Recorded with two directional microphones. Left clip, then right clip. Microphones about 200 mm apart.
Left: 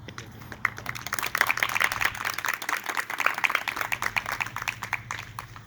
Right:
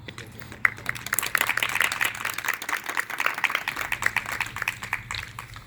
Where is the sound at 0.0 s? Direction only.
Centre (ahead or behind).